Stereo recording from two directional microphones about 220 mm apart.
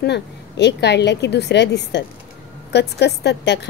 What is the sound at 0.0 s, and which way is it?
A woman's voice, 50° left (ahead or behind).